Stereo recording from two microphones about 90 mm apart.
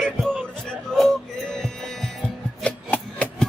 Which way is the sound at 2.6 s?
15° left (ahead or behind).